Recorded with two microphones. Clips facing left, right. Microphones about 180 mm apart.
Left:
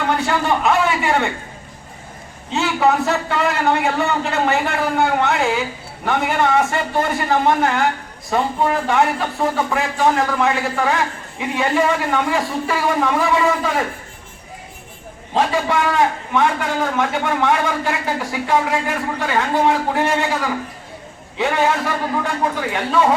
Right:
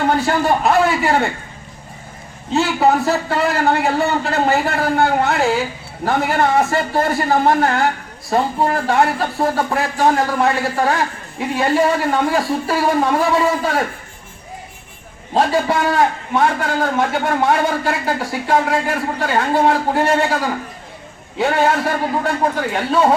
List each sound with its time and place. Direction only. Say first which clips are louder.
0.2 s a man's voice: right 2 dB; 40° right (ahead or behind)
2.5 s a man's voice: right 2 dB; 35° right (ahead or behind)
15.4 s a man's voice: right 2 dB; 35° right (ahead or behind)